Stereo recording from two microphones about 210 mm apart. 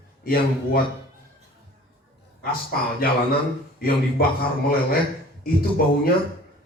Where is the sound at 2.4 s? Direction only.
45° left (ahead or behind).